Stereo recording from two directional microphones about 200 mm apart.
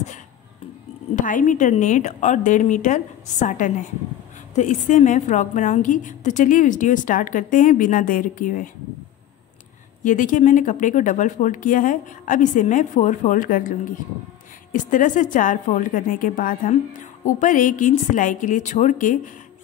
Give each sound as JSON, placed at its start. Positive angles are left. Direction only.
{"t": 1.1, "sound": "a woman's voice", "side_deg": 40}
{"t": 10.0, "sound": "a woman's voice", "side_deg": 40}